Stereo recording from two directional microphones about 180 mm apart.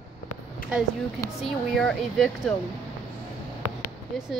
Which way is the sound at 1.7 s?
5° left (ahead or behind).